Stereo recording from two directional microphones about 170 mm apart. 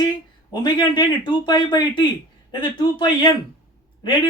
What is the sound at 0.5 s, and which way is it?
Speech, 25° left (ahead or behind).